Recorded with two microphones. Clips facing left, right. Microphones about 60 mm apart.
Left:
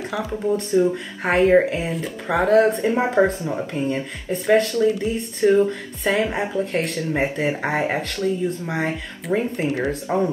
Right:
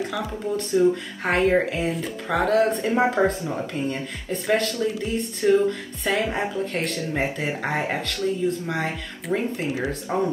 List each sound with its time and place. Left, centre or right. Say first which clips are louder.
0.0 s a sound: left 1 dB; centre
0.5 s speech: left 1 dB; centre
3.2 s speech: left 3 dB; centre
4.7 s speech: left 5 dB; centre
5.5 s speech: left 1 dB; centre
9.6 s speech: left 4 dB; centre